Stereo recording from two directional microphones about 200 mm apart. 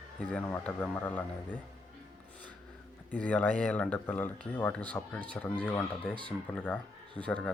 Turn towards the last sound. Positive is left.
turn(degrees=5)  # may be behind; listen again after turning